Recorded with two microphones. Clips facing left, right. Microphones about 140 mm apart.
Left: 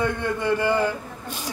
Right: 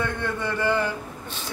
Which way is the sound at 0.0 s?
15° left (ahead or behind).